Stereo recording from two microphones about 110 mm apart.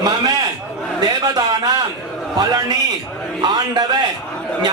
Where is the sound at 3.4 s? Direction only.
40° right (ahead or behind).